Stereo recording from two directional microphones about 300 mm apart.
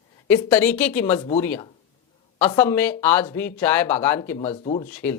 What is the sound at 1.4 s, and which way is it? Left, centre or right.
Speech, centre.